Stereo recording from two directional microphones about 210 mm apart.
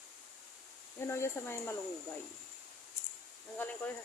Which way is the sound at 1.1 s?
10° left (ahead or behind).